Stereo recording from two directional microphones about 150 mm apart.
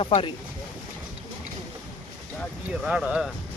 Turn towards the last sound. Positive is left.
turn(degrees=-5)  # may be behind; listen again after turning